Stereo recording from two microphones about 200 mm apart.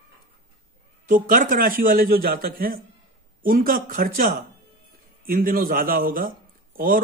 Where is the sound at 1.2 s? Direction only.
45° right (ahead or behind).